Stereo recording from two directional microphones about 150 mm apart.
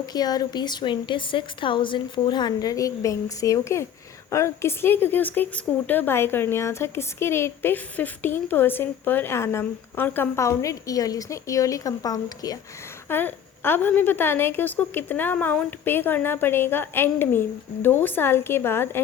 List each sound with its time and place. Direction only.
0.0 s a woman's voice: 25° left (ahead or behind)
13.1 s speech: 15° left (ahead or behind)